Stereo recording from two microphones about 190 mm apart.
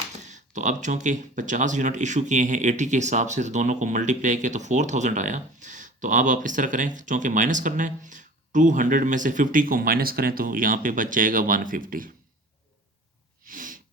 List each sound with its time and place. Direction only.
0.3 s speech: 40° right (ahead or behind)
13.4 s sneeze: 45° right (ahead or behind)